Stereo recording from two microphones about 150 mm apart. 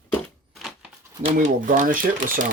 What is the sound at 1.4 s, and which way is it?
Speech, 60° right (ahead or behind).